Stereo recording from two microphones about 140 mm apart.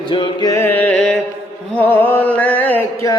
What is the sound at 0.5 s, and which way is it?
Mantra, 15° left (ahead or behind).